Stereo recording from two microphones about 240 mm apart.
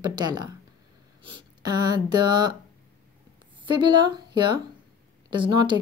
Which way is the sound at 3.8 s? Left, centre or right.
Centre.